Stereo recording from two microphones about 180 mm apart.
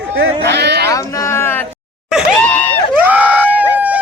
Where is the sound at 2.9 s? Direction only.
10° right (ahead or behind).